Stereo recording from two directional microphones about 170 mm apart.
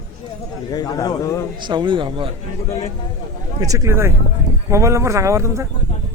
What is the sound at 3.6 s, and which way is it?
Speech, 20° right (ahead or behind).